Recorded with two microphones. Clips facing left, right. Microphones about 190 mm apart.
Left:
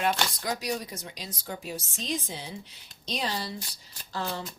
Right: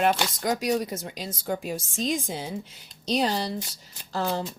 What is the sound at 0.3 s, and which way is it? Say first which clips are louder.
Speech: right 7 dB; 45° right (ahead or behind).